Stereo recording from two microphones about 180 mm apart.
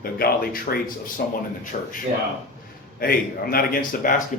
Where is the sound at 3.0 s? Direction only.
55° left (ahead or behind).